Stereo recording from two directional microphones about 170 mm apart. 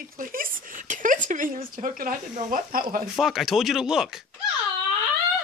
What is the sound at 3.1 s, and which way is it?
Speech, centre (ahead or behind).